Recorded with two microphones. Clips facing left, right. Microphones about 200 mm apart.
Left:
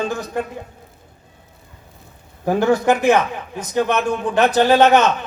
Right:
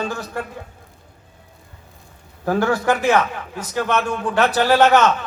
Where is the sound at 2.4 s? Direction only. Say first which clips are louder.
Left 3 dB; 20° left (ahead or behind).